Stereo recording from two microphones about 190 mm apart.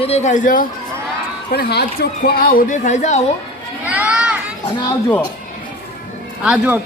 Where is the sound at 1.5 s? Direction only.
55° left (ahead or behind); by 3.2 s 40° left (ahead or behind).